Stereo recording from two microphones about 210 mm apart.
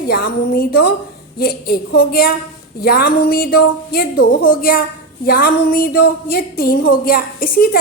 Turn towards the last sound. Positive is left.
turn(degrees=45)  # may be behind; listen again after turning